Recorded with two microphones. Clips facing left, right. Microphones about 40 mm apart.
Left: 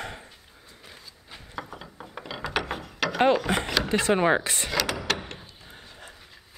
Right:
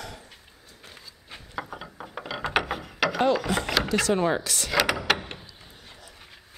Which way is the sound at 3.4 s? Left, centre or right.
Left.